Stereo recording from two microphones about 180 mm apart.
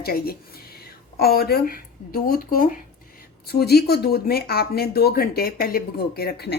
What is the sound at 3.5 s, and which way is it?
A woman's voice, 60° left (ahead or behind).